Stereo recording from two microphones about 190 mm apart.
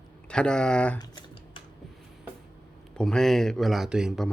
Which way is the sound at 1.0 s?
25° left (ahead or behind).